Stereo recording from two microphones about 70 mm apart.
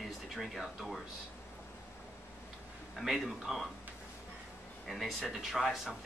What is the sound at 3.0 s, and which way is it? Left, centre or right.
Speech, centre.